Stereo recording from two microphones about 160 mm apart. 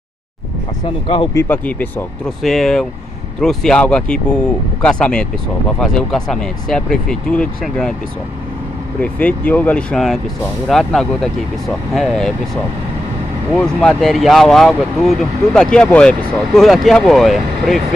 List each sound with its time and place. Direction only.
1.0 s speech: 35° left (ahead or behind)
1.3 s speech: 10° left (ahead or behind)
9.0 s speech: 10° left (ahead or behind)
13.6 s speech: 5° left (ahead or behind)